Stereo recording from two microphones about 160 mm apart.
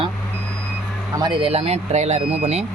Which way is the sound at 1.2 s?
35° right (ahead or behind).